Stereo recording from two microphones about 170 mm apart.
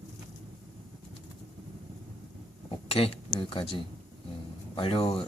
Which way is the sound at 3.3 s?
30° left (ahead or behind).